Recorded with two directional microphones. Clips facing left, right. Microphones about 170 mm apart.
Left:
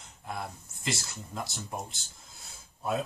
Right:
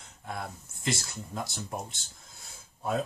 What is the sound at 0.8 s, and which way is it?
Speech, centre (ahead or behind).